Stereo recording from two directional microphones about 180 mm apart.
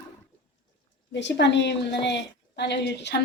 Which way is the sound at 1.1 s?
75° left (ahead or behind).